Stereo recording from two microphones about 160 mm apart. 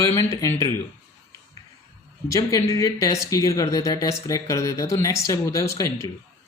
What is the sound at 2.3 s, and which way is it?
Speech, 20° left (ahead or behind).